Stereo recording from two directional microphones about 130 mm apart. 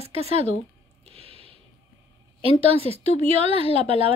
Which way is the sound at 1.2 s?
50° right (ahead or behind).